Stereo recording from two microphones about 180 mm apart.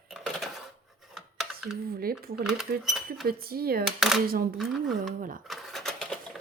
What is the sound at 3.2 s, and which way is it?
Speech, 55° right (ahead or behind).